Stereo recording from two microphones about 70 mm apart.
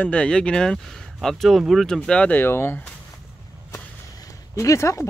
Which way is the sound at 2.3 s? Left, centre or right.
Left.